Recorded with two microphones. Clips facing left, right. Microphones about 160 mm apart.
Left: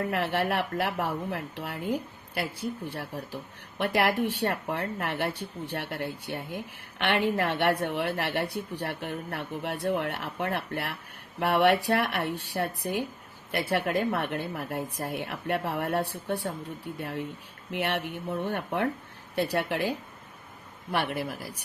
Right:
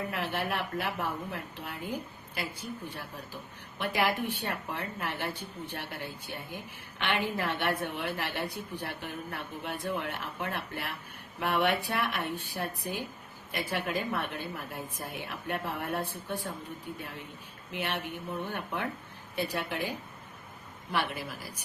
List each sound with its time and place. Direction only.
0.0 s a woman's voice: 70° left (ahead or behind)
20.9 s speech: 65° left (ahead or behind)